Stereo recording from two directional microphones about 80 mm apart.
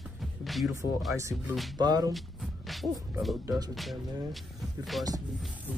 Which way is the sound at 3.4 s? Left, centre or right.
Right.